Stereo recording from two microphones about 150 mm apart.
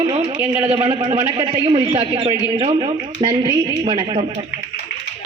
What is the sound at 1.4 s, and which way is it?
A man's voice, 30° right (ahead or behind).